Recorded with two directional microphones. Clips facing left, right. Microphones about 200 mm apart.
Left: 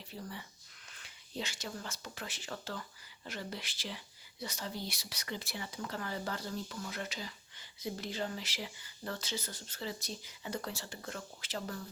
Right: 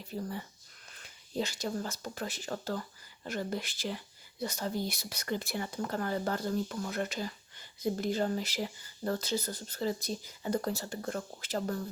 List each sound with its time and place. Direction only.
0.1 s speech: 45° right (ahead or behind)